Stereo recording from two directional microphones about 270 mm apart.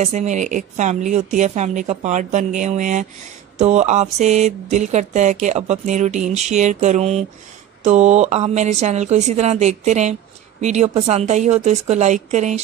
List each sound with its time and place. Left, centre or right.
0.0 s speech: right